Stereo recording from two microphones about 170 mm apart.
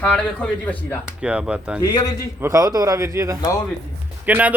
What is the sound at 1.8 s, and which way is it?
Speech, 20° left (ahead or behind).